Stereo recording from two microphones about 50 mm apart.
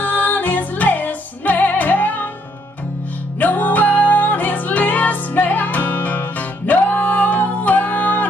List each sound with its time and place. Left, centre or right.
0.0 s music: left
3.3 s music: left